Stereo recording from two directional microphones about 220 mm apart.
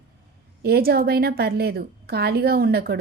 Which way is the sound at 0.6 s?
45° right (ahead or behind).